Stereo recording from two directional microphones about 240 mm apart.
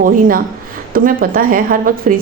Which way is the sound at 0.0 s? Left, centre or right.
Right.